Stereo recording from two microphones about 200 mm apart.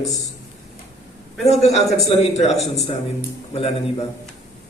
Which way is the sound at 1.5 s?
35° left (ahead or behind).